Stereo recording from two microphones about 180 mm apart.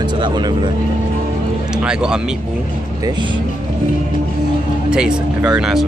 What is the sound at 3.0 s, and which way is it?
Speech, 25° right (ahead or behind).